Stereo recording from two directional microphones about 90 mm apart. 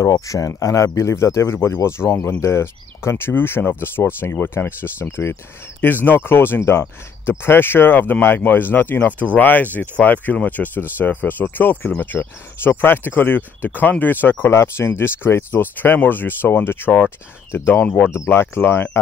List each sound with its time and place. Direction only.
0.1 s speech: 40° left (ahead or behind); by 18.1 s 15° left (ahead or behind)
18.1 s speech: 30° left (ahead or behind)